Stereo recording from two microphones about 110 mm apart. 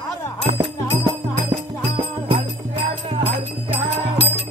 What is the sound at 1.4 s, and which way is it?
Music, 55° right (ahead or behind).